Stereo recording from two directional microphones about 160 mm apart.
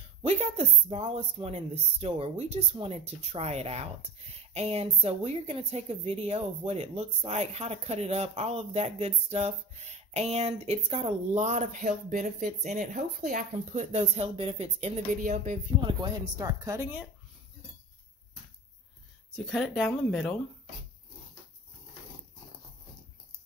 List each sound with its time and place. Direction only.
0.2 s speech: 40° right (ahead or behind)
15.8 s speech: 25° right (ahead or behind)
19.3 s speech: centre (ahead or behind)